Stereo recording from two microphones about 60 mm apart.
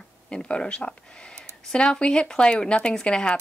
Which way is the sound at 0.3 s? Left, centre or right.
Centre.